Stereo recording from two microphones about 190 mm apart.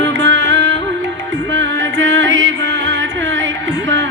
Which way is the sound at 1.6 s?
75° right (ahead or behind).